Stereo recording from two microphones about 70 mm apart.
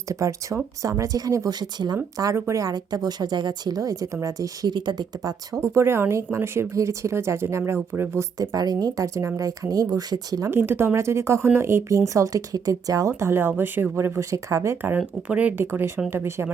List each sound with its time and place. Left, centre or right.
0.1 s speech: right
1.5 s speech: right
2.3 s speech: right
2.7 s speech: right
3.8 s speech: right
4.6 s speech: right
5.5 s speech: right
8.4 s speech: right
9.1 s speech: right
10.5 s speech: right
12.0 s speech: right
13.1 s speech: right
14.8 s speech: right
15.6 s speech: right